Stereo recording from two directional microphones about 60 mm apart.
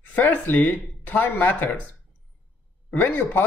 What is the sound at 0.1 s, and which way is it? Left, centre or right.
Speech, left.